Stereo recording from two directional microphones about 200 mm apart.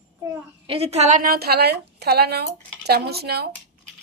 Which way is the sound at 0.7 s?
30° right (ahead or behind).